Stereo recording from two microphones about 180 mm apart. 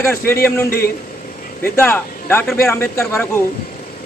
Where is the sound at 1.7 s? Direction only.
10° left (ahead or behind).